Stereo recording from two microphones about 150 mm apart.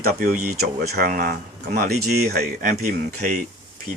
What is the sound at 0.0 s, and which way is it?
Speech, 85° right.